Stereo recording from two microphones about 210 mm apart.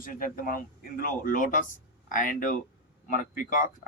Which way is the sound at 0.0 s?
40° left (ahead or behind).